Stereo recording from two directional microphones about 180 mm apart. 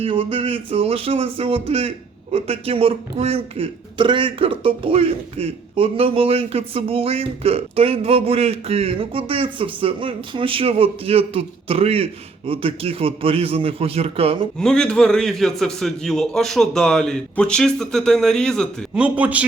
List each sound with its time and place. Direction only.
0.0 s a man's voice: 30° right (ahead or behind)
14.6 s a man's voice: 5° left (ahead or behind)
18.9 s speech: 10° right (ahead or behind)